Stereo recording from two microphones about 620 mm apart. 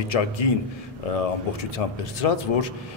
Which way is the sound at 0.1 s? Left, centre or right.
Left.